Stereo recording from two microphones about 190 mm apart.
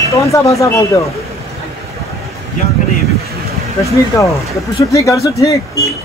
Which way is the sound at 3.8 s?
15° left (ahead or behind).